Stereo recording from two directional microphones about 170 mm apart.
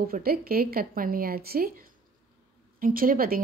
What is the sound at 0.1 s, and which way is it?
A woman's voice, 60° right (ahead or behind).